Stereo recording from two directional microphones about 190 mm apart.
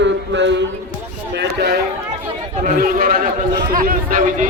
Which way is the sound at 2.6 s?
45° right (ahead or behind).